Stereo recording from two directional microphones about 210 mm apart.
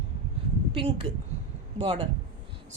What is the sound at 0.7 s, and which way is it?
A woman's voice, 25° right (ahead or behind).